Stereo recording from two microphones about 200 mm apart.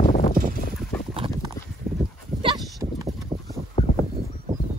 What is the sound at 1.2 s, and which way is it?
Horse, 25° right (ahead or behind).